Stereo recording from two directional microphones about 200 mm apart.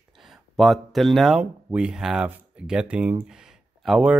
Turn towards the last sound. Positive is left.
turn(degrees=-5)  # may be behind; listen again after turning